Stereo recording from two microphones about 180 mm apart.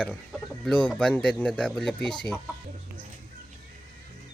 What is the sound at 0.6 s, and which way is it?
Speech, 5° left (ahead or behind).